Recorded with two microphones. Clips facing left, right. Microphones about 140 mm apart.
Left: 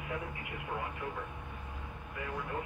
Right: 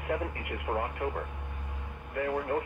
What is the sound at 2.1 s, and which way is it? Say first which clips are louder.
Speech: right 10 dB; 60° right (ahead or behind).